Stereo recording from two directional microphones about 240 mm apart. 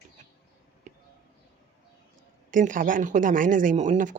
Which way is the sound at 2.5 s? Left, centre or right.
Right.